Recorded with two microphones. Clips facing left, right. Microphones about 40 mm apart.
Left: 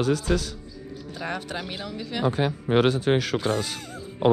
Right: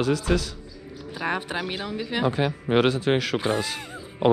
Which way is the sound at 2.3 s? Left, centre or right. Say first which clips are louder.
Left 2 dB; right.